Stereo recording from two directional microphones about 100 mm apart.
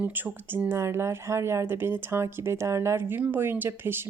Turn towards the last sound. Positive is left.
turn(degrees=-20)  # may be behind; listen again after turning